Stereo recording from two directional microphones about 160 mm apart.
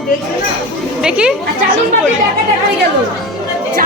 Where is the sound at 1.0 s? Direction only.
5° right (ahead or behind).